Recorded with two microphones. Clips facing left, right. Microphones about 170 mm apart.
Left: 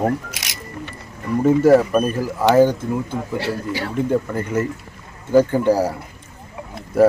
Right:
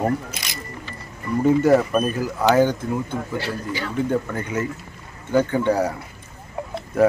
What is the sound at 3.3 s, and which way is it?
Speech, 70° left (ahead or behind).